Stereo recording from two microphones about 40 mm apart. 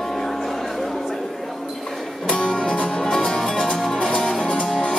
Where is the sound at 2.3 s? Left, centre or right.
Centre.